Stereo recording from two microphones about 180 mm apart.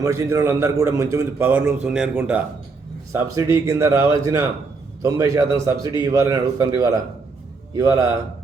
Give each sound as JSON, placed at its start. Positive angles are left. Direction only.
{"t": 0.0, "sound": "a man's voice", "side_deg": -15}